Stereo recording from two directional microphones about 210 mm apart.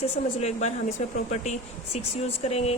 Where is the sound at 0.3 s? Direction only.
30° left (ahead or behind).